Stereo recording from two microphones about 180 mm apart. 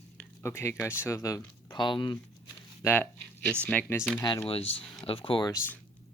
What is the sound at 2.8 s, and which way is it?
Speech, 10° left (ahead or behind).